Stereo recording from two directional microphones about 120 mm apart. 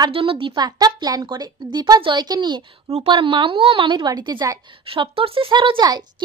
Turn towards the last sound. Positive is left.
turn(degrees=-35)  # may be behind; listen again after turning